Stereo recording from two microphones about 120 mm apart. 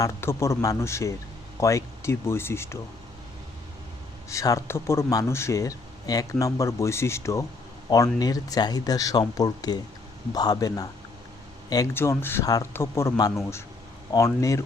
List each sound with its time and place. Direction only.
0.0 s speech: 20° left (ahead or behind)
4.3 s speech: 25° left (ahead or behind)
11.9 s speech: 20° left (ahead or behind)